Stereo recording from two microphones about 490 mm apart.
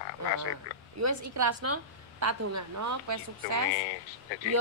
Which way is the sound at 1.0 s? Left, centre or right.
Right.